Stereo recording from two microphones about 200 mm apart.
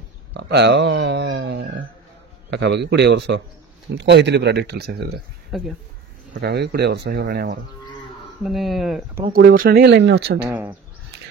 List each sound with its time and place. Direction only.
0.3 s speech: 60° right (ahead or behind)
5.5 s speech: centre (ahead or behind)
6.3 s speech: 55° right (ahead or behind)
8.4 s speech: centre (ahead or behind)
9.2 s speech: 45° right (ahead or behind)
10.4 s speech: 10° right (ahead or behind)